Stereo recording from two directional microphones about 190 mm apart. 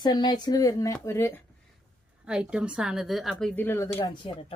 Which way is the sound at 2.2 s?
5° right (ahead or behind).